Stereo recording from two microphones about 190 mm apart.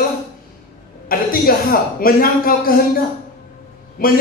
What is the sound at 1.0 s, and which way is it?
A man's voice, 50° left (ahead or behind).